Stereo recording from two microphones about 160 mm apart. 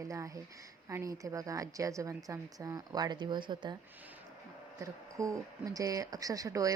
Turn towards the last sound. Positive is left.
turn(degrees=-20)  # may be behind; listen again after turning